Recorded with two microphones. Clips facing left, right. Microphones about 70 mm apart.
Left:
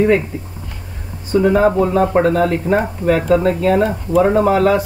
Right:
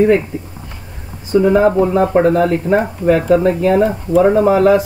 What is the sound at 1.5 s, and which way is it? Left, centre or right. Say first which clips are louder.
Speech: right 2 dB; centre.